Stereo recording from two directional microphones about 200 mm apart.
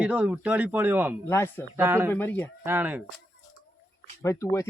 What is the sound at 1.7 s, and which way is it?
Speech, 10° right (ahead or behind).